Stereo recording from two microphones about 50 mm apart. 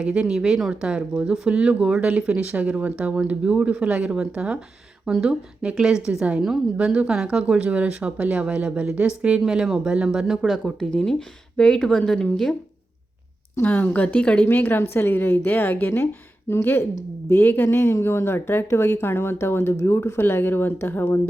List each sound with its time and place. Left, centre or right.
0.0 s speech: centre
10.4 s speech: centre
10.8 s speech: centre
13.6 s a woman's voice: left
14.4 s a woman's voice: left
16.5 s a woman's voice: left
17.2 s a woman's voice: left